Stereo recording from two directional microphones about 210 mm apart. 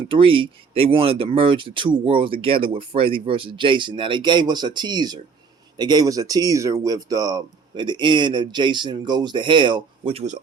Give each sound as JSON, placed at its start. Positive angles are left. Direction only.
{"t": 0.1, "sound": "speech", "side_deg": -25}